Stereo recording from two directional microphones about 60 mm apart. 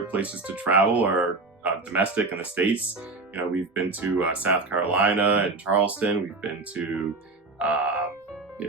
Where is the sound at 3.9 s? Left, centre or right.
Right.